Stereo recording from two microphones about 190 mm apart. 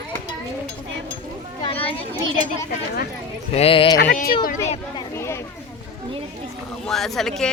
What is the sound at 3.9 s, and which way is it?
Speech, 50° left (ahead or behind).